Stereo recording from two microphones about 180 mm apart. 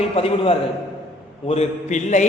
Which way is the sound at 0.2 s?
30° left (ahead or behind).